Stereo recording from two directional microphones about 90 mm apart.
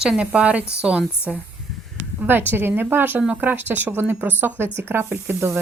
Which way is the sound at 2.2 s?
20° right (ahead or behind).